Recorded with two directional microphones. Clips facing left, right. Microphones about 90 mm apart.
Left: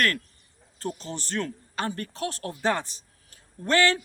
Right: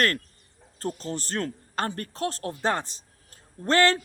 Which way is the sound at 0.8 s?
40° right (ahead or behind).